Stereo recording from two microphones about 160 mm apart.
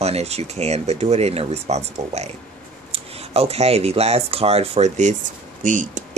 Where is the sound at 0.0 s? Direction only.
40° right (ahead or behind).